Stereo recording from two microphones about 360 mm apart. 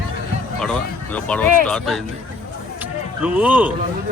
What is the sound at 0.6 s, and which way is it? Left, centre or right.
A man's voice, centre.